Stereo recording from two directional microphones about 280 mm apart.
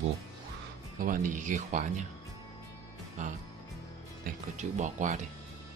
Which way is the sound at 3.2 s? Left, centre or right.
Right.